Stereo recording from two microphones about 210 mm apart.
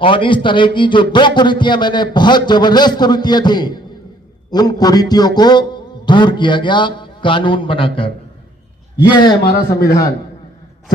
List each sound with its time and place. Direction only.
0.0 s a man's voice: 25° left (ahead or behind)
9.5 s speech: 45° left (ahead or behind)